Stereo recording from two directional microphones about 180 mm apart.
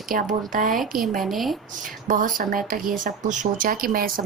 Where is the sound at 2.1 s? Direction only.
45° right (ahead or behind).